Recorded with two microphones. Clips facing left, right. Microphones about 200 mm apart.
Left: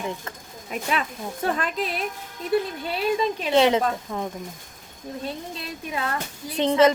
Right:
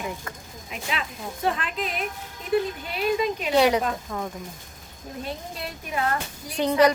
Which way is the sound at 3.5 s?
20° left (ahead or behind).